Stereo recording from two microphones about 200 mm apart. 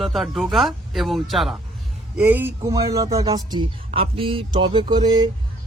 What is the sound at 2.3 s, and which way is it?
A man's voice, 10° right (ahead or behind).